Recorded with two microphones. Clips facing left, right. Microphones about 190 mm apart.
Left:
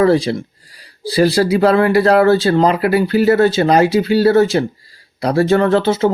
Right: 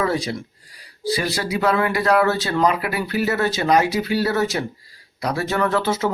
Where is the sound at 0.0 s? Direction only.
30° left (ahead or behind).